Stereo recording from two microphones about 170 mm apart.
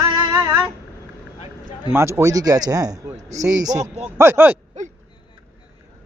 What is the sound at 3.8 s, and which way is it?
Speech, 40° right (ahead or behind).